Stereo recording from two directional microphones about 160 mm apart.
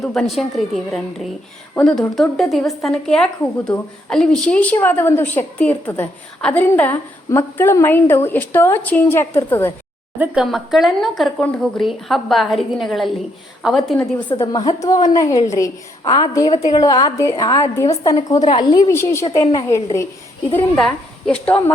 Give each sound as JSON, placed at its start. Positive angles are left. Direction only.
{"t": 0.0, "sound": "a woman's voice", "side_deg": 0}
{"t": 10.2, "sound": "speech", "side_deg": -5}
{"t": 14.3, "sound": "a woman's voice", "side_deg": 30}
{"t": 16.5, "sound": "a woman's voice", "side_deg": 40}
{"t": 16.7, "sound": "a woman's voice", "side_deg": 25}
{"t": 18.9, "sound": "a woman's voice", "side_deg": 15}
{"t": 20.7, "sound": "speech", "side_deg": 5}